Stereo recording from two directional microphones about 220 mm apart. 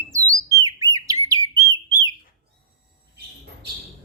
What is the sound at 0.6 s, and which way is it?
Bird, 15° right (ahead or behind).